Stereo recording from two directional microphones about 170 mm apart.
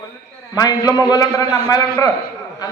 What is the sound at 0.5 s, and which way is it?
A man's voice, 20° left (ahead or behind).